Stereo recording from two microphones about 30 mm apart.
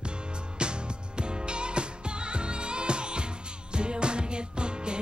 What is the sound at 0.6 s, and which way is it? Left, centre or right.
Music, right.